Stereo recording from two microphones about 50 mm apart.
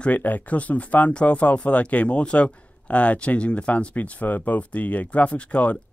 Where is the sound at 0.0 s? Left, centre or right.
Left.